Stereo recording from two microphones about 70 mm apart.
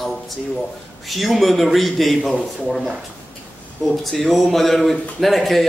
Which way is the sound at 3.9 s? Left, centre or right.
Centre.